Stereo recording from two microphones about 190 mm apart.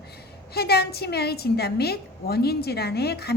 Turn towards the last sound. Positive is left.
turn(degrees=60)  # may be behind; listen again after turning